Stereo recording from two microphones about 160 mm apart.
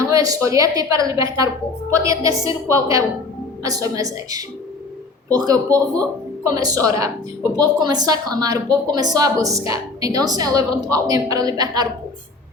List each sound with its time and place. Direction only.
0.0 s speech: 20° right (ahead or behind)
10.7 s speech: 5° left (ahead or behind)
10.9 s speech: 20° right (ahead or behind)